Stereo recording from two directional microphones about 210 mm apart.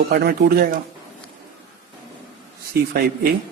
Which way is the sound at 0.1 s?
50° right (ahead or behind).